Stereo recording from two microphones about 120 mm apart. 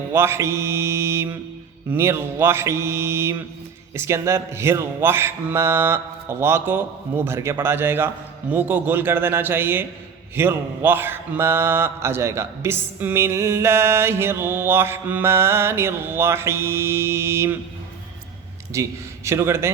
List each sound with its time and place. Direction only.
0.1 s a man's voice: 20° right (ahead or behind)
18.7 s speech: 25° right (ahead or behind)